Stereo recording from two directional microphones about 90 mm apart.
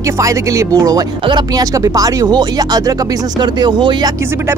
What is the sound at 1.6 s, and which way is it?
Speech, 40° right (ahead or behind).